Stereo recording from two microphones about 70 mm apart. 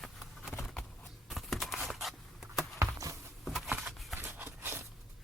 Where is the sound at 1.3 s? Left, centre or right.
Centre.